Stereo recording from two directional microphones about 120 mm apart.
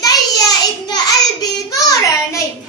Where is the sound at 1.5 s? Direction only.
30° left (ahead or behind).